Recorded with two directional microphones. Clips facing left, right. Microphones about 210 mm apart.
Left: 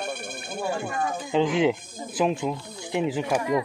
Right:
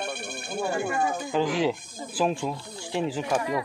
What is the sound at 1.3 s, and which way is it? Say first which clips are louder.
Speech: left 5 dB; 20° left (ahead or behind).